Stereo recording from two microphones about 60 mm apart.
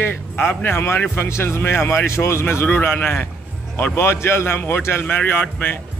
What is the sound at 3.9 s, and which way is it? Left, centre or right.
A man's voice, left.